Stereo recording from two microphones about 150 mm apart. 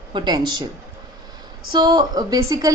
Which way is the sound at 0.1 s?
30° right (ahead or behind).